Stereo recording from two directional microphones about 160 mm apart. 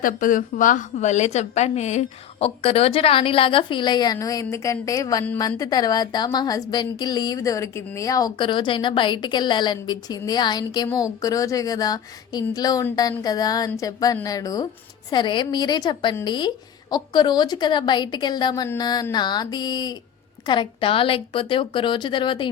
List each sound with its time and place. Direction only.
0.0 s a woman's voice: 55° left (ahead or behind); by 22.4 s 30° left (ahead or behind)